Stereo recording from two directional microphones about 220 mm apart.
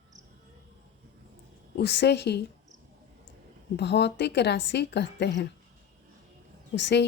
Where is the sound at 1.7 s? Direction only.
50° left (ahead or behind).